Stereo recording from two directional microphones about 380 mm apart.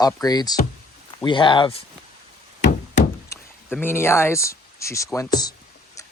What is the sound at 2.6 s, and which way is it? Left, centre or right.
Knock, centre.